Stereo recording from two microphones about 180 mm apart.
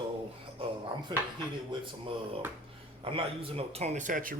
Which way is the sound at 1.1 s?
25° right (ahead or behind).